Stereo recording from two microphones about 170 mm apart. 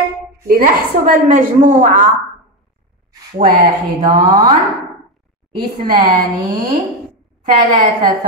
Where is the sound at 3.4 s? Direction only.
60° right (ahead or behind).